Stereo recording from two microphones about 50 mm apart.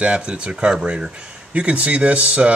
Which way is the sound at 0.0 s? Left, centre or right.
Right.